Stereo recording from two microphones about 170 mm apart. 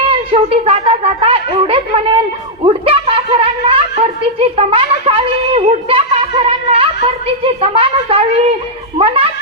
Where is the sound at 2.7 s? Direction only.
35° right (ahead or behind).